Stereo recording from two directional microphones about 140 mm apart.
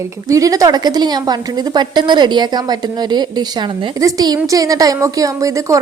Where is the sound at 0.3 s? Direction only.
25° right (ahead or behind).